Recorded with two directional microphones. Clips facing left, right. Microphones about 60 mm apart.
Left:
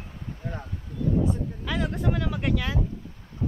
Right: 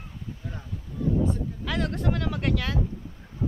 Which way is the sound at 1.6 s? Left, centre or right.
Centre.